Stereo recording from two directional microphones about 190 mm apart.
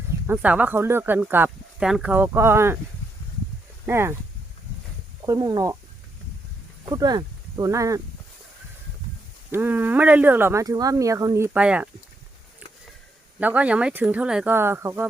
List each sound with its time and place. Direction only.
0.3 s speech: 10° right (ahead or behind)
3.8 s speech: 15° right (ahead or behind)
5.2 s speech: 20° right (ahead or behind)
6.8 s speech: 20° right (ahead or behind)
9.5 s speech: 10° right (ahead or behind)
13.4 s speech: 10° right (ahead or behind)